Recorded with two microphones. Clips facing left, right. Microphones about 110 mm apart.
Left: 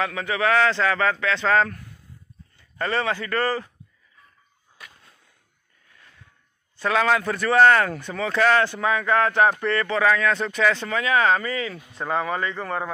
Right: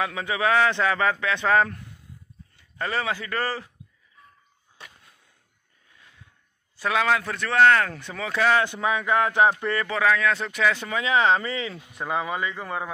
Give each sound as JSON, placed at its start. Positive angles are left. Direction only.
{"t": 0.0, "sound": "speech", "side_deg": -15}
{"t": 2.8, "sound": "speech", "side_deg": -5}
{"t": 4.8, "sound": "a sound", "side_deg": -30}
{"t": 5.9, "sound": "a sound", "side_deg": -15}
{"t": 6.8, "sound": "speech", "side_deg": -5}
{"t": 11.0, "sound": "speech", "side_deg": -20}
{"t": 12.0, "sound": "speech", "side_deg": -15}